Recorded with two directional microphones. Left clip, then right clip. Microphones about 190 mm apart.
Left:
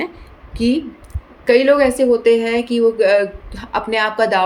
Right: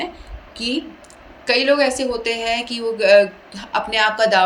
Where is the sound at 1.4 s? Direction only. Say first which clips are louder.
Left 4 dB; 55° left (ahead or behind).